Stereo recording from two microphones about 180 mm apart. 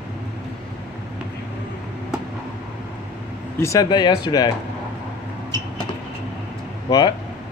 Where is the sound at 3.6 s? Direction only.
20° left (ahead or behind).